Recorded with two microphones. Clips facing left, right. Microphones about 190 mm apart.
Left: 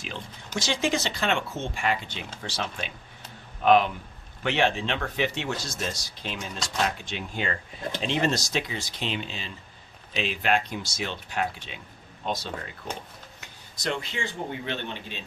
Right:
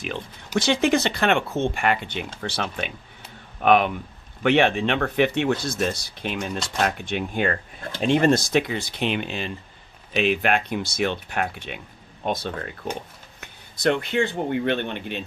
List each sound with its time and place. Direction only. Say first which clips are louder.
0.0 s speech: right 6 dB; 60° right (ahead or behind)